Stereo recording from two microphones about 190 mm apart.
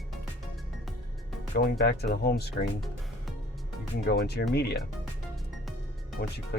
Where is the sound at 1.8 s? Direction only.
60° left (ahead or behind).